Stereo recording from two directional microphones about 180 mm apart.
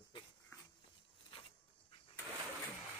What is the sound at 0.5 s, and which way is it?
Dog, 15° left (ahead or behind).